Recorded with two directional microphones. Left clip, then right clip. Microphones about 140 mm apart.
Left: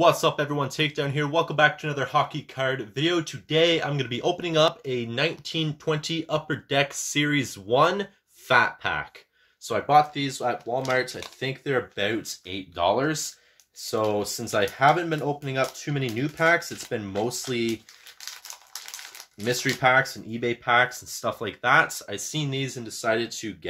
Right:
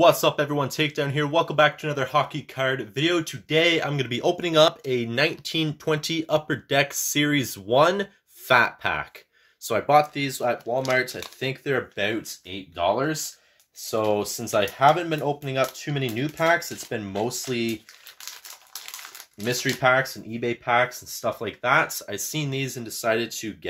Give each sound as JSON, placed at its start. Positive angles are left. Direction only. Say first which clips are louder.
{"t": 0.0, "sound": "speech", "louder": "right 2 dB", "side_deg": -40}
{"t": 12.4, "sound": "speech", "louder": "even", "side_deg": -5}
{"t": 13.7, "sound": "speech", "louder": "right 1 dB", "side_deg": -25}
{"t": 19.4, "sound": "speech", "louder": "even", "side_deg": -30}